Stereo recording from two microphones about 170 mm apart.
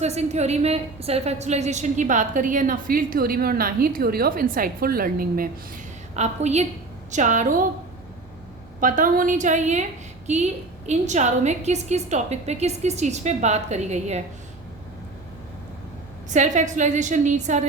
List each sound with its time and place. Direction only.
0.0 s a woman's voice: 40° right (ahead or behind); by 5.8 s 55° right (ahead or behind)
6.1 s a woman's voice: 40° right (ahead or behind)
8.8 s a woman's voice: 50° right (ahead or behind)
16.3 s a woman's voice: 45° right (ahead or behind)